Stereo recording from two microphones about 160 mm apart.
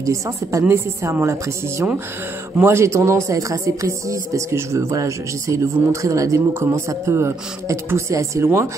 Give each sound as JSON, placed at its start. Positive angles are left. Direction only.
{"t": 0.0, "sound": "a woman's voice", "side_deg": -20}